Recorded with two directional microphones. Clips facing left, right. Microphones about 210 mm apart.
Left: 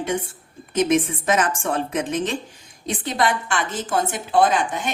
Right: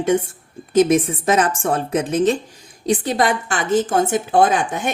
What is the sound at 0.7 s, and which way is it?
Speech, 35° right (ahead or behind).